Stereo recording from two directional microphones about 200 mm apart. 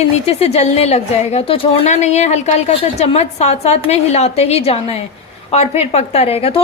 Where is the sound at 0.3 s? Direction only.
30° left (ahead or behind).